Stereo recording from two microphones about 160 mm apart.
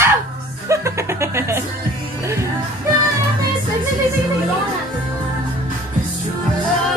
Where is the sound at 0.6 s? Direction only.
20° right (ahead or behind).